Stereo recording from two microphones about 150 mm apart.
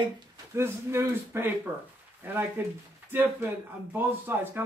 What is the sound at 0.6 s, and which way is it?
Speech, 15° right (ahead or behind).